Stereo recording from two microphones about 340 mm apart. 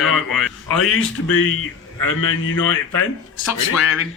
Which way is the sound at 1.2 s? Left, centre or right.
Left.